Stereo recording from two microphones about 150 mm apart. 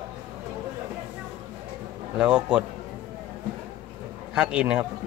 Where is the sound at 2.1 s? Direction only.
5° right (ahead or behind).